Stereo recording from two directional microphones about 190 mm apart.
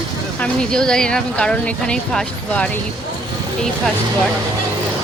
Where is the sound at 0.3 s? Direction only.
5° left (ahead or behind).